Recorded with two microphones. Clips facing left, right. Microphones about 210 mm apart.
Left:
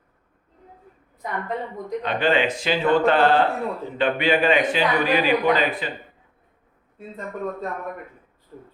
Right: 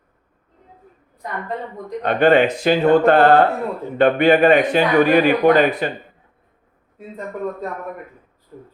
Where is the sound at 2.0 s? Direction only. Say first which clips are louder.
Right 8 dB; 50° right (ahead or behind).